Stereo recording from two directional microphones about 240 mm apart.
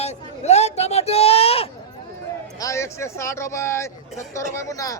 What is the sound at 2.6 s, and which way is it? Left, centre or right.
A man's voice, centre.